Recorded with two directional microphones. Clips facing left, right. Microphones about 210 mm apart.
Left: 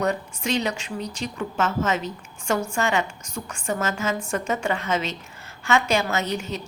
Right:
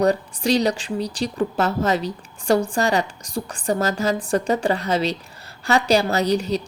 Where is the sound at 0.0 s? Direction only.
35° right (ahead or behind).